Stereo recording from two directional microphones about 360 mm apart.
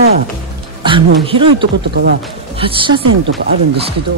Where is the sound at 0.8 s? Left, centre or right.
Centre.